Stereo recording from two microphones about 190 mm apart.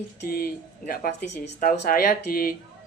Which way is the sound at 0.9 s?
50° left (ahead or behind).